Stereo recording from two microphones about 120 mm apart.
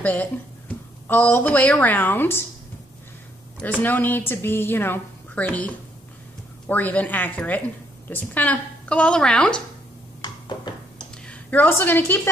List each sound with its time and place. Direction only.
0.0 s a woman's voice: 15° left (ahead or behind)
3.6 s a woman's voice: 15° left (ahead or behind)
10.2 s a sound: 40° left (ahead or behind)
11.2 s a woman's voice: 15° left (ahead or behind)